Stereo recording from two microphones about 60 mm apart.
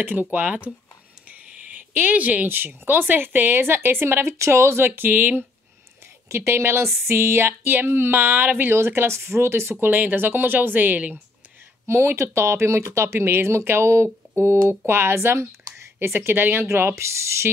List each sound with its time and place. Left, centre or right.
0.0 s speech: right
6.2 s speech: right
8.7 s speech: right
9.8 s speech: right
11.8 s speech: right
16.6 s speech: right